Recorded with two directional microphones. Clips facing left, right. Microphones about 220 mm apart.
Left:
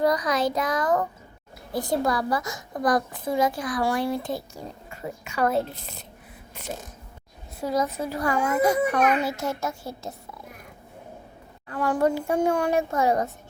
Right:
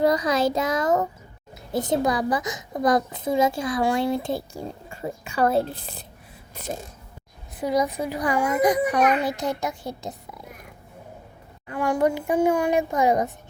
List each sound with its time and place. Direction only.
0.0 s a woman's voice: 25° right (ahead or behind)
7.6 s a child's voice: 15° right (ahead or behind)
11.7 s a child's voice: 15° right (ahead or behind)